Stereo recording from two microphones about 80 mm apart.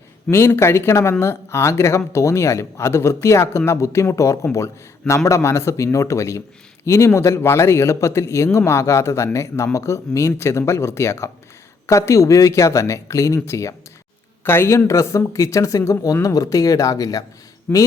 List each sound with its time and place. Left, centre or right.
0.3 s speech: left
17.7 s speech: left